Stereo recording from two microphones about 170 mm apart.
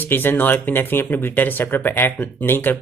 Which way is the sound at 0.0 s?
10° left (ahead or behind).